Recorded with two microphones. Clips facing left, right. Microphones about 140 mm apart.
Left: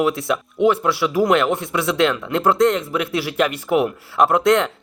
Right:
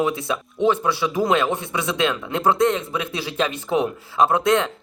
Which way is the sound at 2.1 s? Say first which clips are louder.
Left 2 dB; 15° right (ahead or behind).